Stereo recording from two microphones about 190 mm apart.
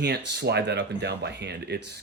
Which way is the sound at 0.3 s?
60° right (ahead or behind).